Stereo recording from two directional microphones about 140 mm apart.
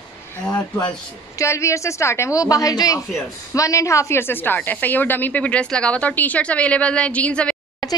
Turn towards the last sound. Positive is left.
turn(degrees=10)  # may be behind; listen again after turning